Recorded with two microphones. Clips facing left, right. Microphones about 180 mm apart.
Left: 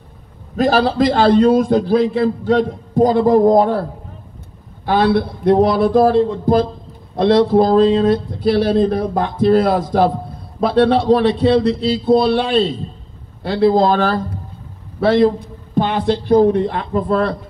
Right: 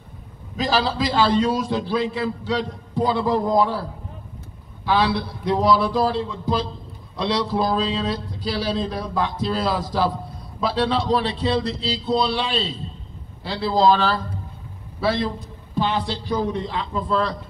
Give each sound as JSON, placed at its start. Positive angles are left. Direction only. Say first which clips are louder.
{"t": 0.6, "sound": "speech", "louder": "left 8 dB", "side_deg": 55}
{"t": 4.8, "sound": "speech", "louder": "left 6 dB", "side_deg": 55}